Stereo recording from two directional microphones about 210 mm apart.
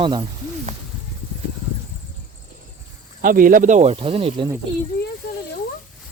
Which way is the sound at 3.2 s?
40° right (ahead or behind).